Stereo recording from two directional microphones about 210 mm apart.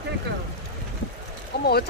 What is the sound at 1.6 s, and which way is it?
Speech, 50° left (ahead or behind).